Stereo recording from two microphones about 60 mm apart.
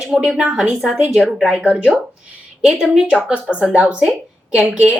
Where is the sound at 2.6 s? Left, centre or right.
Centre.